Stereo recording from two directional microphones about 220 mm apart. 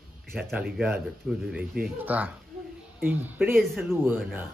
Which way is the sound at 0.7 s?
5° right (ahead or behind).